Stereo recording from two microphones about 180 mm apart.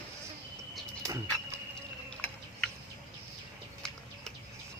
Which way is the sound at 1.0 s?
15° right (ahead or behind).